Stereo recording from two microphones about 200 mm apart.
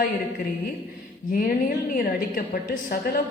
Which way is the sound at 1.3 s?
45° left (ahead or behind).